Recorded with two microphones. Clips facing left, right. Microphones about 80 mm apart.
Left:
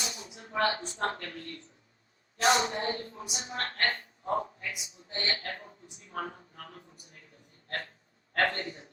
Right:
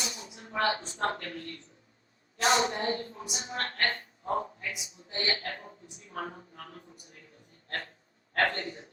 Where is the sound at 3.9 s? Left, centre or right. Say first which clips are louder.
Even; right.